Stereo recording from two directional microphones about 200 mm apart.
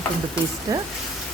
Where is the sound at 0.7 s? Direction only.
20° right (ahead or behind).